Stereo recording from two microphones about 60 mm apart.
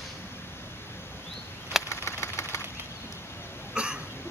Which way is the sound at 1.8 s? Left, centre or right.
Left.